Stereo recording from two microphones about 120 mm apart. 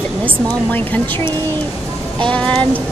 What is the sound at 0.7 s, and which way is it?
Speech, 15° left (ahead or behind).